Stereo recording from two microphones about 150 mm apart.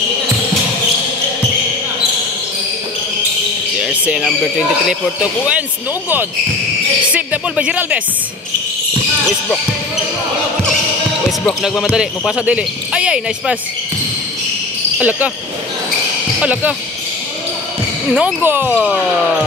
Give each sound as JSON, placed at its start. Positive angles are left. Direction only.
{"t": 3.8, "sound": "speech", "side_deg": -5}
{"t": 7.1, "sound": "speech", "side_deg": -10}
{"t": 11.6, "sound": "speech", "side_deg": 0}
{"t": 15.0, "sound": "speech", "side_deg": -10}
{"t": 16.3, "sound": "speech", "side_deg": -10}
{"t": 18.1, "sound": "speech", "side_deg": -10}